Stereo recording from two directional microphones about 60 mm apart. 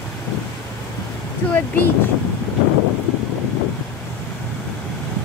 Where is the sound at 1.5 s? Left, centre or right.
Left.